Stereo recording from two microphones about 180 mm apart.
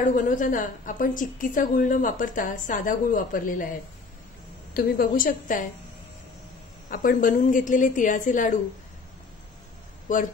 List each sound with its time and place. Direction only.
0.0 s a woman's voice: 45° left (ahead or behind)
4.7 s a woman's voice: 50° left (ahead or behind)
6.9 s a woman's voice: 50° left (ahead or behind)
10.1 s a woman's voice: 45° left (ahead or behind)